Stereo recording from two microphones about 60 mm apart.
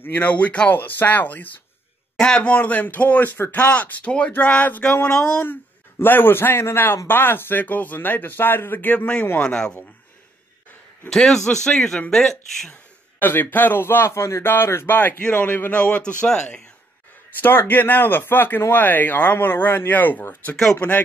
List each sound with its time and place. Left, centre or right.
0.0 s speech: left
2.1 s speech: centre
5.4 s a man's voice: left
9.0 s speech: centre
11.1 s speech: centre
13.2 s speech: left; by 16.6 s centre
17.4 s speech: left